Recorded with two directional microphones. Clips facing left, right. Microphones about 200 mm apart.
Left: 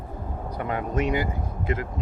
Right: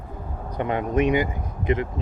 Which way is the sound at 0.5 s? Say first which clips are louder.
Right 5 dB; 20° right (ahead or behind).